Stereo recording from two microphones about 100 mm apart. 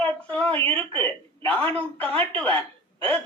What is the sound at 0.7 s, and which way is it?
Speech, 20° left (ahead or behind).